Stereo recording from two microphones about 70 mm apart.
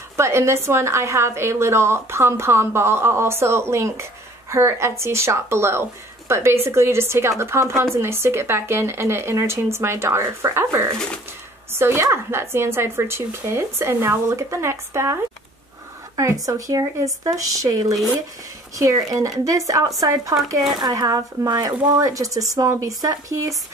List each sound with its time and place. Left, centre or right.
0.2 s a woman's voice: right
16.4 s speech: right
20.8 s speech: right